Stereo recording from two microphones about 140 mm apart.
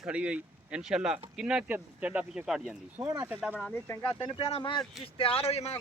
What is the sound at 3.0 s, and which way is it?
Speech, 25° right (ahead or behind).